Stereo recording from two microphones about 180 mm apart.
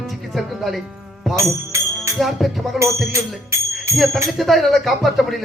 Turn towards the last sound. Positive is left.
turn(degrees=0)  # may be behind; listen again after turning